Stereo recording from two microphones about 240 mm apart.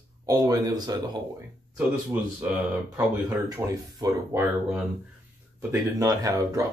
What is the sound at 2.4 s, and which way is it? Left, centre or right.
Speech, centre.